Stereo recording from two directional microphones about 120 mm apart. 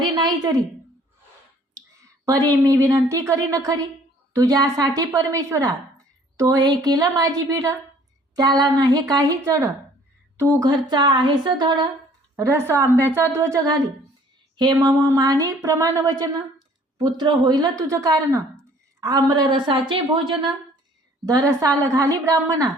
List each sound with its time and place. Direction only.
0.0 s a sound: 40° right (ahead or behind)
2.0 s a woman's voice: 25° right (ahead or behind)
10.3 s speech: 25° right (ahead or behind)
12.4 s a woman's voice: 25° right (ahead or behind)